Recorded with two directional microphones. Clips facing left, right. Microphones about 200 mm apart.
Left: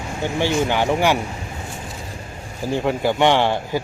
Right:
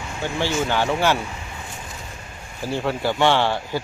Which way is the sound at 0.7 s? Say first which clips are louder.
Left 2 dB; 15° left (ahead or behind).